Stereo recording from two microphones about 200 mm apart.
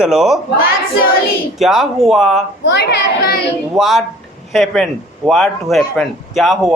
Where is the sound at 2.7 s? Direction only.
55° left (ahead or behind).